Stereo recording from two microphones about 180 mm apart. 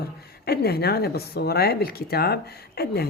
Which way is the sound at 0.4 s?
60° left (ahead or behind).